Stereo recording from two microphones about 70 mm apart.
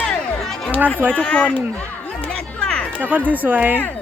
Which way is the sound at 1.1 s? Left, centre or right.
Centre.